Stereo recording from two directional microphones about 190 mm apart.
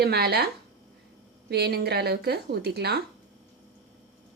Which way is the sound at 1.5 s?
60° right (ahead or behind).